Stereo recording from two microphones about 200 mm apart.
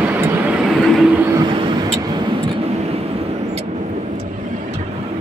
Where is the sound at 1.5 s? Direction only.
25° right (ahead or behind).